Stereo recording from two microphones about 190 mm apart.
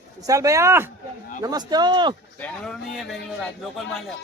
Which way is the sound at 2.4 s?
5° left (ahead or behind).